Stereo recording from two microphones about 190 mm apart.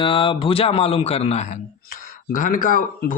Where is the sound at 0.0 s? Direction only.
25° left (ahead or behind).